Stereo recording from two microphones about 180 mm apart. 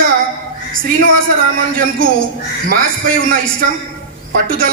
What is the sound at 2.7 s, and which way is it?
Speech, 50° right (ahead or behind).